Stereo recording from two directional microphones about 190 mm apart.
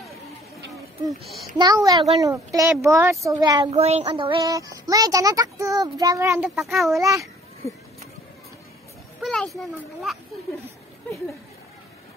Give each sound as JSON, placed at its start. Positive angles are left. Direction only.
{"t": 1.0, "sound": "a child's voice", "side_deg": 0}
{"t": 1.6, "sound": "a child's voice", "side_deg": -20}
{"t": 3.7, "sound": "speech", "side_deg": -35}
{"t": 6.5, "sound": "a child's voice", "side_deg": 0}
{"t": 7.0, "sound": "speech", "side_deg": -15}
{"t": 9.2, "sound": "a child's voice", "side_deg": 0}